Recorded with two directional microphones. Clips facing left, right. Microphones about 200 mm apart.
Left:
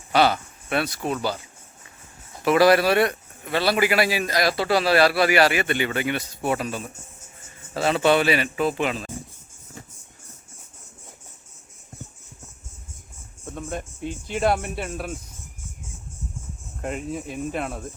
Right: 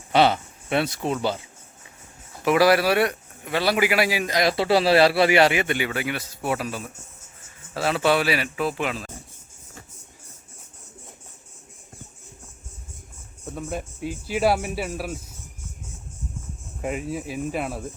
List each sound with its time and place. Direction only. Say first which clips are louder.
0.1 s speech: right 1 dB; 25° right (ahead or behind)
2.4 s a man's voice: left 1 dB; 10° right (ahead or behind)
13.4 s speech: right 1 dB; 5° right (ahead or behind)
16.8 s speech: right 1 dB; 5° right (ahead or behind)